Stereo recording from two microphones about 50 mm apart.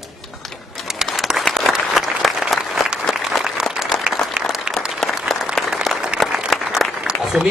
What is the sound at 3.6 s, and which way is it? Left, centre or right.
Applause, centre.